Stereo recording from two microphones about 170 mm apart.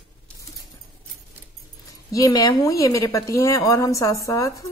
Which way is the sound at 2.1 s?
20° left (ahead or behind).